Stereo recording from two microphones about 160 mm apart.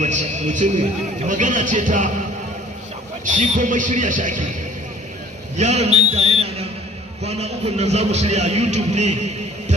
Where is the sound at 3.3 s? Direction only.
50° right (ahead or behind).